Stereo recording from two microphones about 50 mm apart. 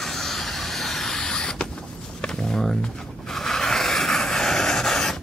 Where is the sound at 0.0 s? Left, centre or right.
Centre.